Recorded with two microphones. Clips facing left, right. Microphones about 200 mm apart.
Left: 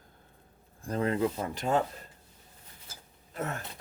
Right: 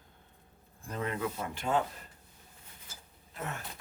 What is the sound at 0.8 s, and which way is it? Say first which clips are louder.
Speech: left 7 dB; 35° left (ahead or behind).